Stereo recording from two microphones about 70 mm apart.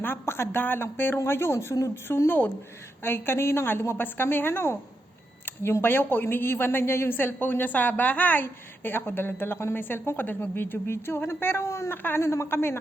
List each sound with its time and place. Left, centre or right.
0.0 s speech: left
5.8 s speech: left